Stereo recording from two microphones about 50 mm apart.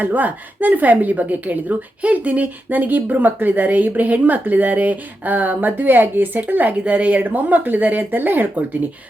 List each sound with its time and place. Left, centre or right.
0.0 s a woman's voice: right